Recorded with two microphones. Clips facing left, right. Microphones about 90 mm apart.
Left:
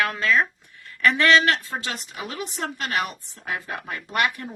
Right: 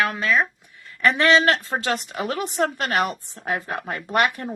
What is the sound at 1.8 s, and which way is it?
A woman's voice, 55° right (ahead or behind).